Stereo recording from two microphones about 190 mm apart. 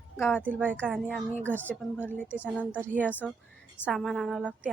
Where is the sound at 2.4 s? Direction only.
5° right (ahead or behind).